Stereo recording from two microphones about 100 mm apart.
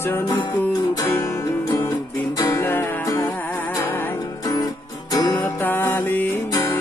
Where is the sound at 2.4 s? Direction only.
30° left (ahead or behind).